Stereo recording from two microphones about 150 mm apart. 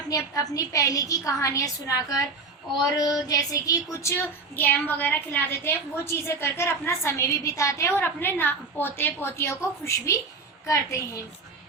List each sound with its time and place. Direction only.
0.1 s a woman's voice: 25° left (ahead or behind)